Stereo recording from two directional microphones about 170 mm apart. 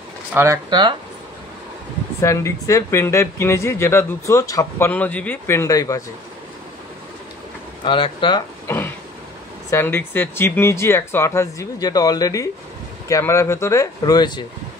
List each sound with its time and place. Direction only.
0.3 s speech: 15° right (ahead or behind)
0.7 s speech: 25° right (ahead or behind)
2.2 s speech: 20° left (ahead or behind)
7.8 s speech: 30° left (ahead or behind)
8.6 s a sound: 15° left (ahead or behind)
9.7 s speech: 15° left (ahead or behind)